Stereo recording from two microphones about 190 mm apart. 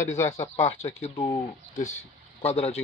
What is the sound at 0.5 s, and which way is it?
Speech, 35° left (ahead or behind).